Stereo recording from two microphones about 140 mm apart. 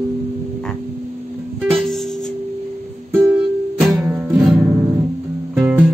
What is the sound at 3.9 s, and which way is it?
Music, 10° right (ahead or behind).